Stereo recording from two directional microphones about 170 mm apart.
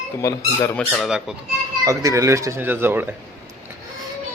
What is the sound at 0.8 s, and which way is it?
Speech, centre (ahead or behind).